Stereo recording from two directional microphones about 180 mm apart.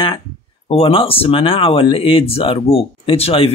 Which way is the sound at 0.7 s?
30° left (ahead or behind).